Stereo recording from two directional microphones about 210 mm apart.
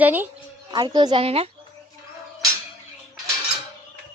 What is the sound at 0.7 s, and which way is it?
Speech, 20° right (ahead or behind).